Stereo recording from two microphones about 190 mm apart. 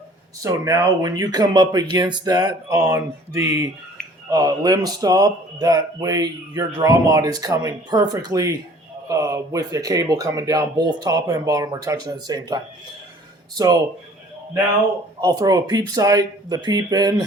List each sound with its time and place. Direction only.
0.4 s speech: 15° right (ahead or behind)
4.3 s speech: 20° right (ahead or behind)
15.2 s speech: 20° right (ahead or behind)